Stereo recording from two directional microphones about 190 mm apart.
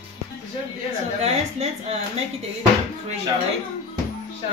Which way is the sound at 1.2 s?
35° right (ahead or behind).